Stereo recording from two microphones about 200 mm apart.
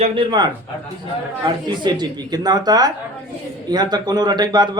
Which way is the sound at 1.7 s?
20° right (ahead or behind).